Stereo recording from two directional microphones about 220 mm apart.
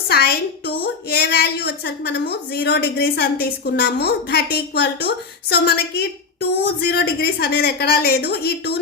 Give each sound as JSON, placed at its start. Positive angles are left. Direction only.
{"t": 0.1, "sound": "a woman's voice", "side_deg": 45}